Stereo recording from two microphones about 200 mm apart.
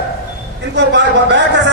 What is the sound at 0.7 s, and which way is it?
A man's voice, 60° right (ahead or behind).